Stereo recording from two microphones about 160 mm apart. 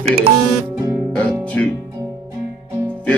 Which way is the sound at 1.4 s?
10° left (ahead or behind).